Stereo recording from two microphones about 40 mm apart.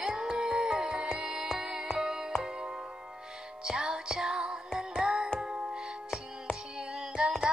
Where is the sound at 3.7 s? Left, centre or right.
Centre.